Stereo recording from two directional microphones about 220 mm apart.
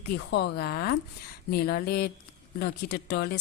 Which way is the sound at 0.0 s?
50° left (ahead or behind).